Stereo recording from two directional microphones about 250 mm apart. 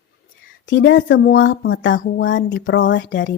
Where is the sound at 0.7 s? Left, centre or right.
Left.